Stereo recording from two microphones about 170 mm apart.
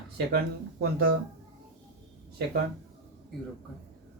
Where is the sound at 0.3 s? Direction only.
70° right (ahead or behind).